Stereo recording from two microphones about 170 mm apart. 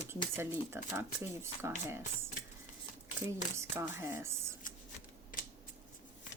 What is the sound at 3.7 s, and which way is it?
Speech, 15° right (ahead or behind).